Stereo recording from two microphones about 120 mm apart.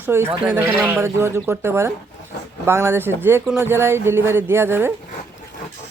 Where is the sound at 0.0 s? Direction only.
20° right (ahead or behind).